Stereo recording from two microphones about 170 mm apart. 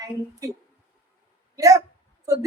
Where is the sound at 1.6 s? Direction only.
20° right (ahead or behind).